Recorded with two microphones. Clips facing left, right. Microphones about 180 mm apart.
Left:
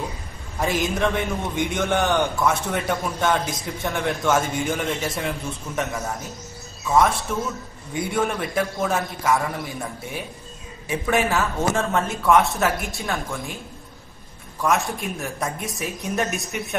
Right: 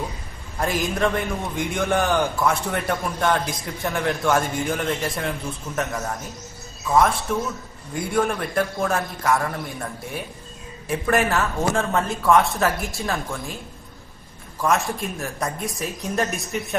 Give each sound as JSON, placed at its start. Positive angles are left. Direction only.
{"t": 0.6, "sound": "a man's voice", "side_deg": 0}
{"t": 14.6, "sound": "a man's voice", "side_deg": 0}